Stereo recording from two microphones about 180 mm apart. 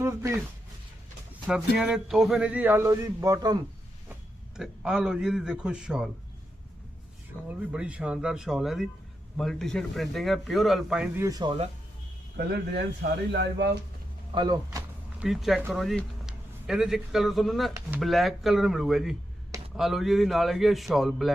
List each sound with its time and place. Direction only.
0.0 s a sound: 15° right (ahead or behind)
1.5 s speech: 5° right (ahead or behind); by 3.6 s 20° right (ahead or behind)
4.5 s speech: 5° right (ahead or behind)
7.4 s speech: 5° right (ahead or behind)
11.2 s speech: 20° right (ahead or behind)
12.5 s speech: 65° right (ahead or behind)
14.3 s speech: 20° right (ahead or behind)
15.2 s speech: centre (ahead or behind)